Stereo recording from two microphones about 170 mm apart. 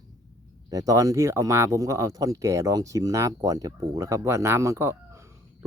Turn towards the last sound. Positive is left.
turn(degrees=-15)  # may be behind; listen again after turning